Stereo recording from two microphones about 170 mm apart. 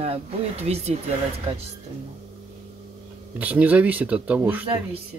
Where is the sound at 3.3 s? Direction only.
10° right (ahead or behind).